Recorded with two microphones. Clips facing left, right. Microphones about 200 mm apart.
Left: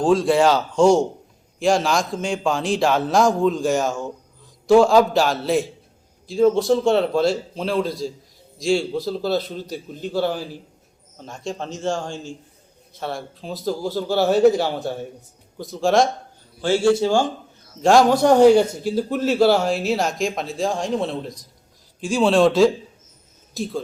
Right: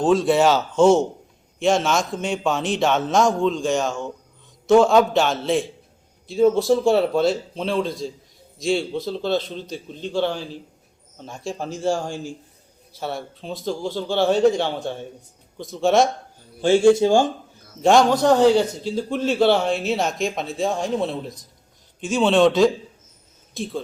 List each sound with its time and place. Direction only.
0.0 s a man's voice: centre (ahead or behind)
11.2 s a man's voice: 5° right (ahead or behind)
16.6 s a man's voice: 20° right (ahead or behind)
17.8 s a man's voice: centre (ahead or behind)
18.2 s a man's voice: 15° left (ahead or behind)